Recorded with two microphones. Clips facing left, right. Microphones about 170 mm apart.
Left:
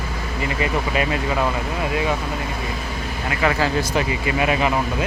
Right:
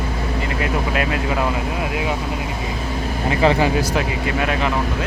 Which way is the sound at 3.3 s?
25° right (ahead or behind).